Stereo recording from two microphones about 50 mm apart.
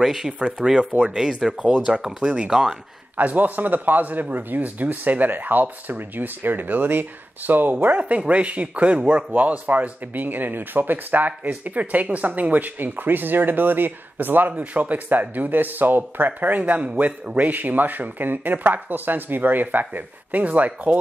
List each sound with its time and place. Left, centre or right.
0.0 s speech: centre
3.2 s speech: right
8.0 s speech: right
14.5 s speech: right